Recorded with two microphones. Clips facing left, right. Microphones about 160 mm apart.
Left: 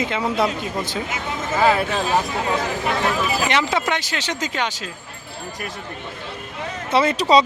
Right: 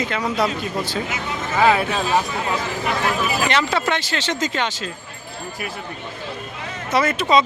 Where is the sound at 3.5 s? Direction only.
15° left (ahead or behind).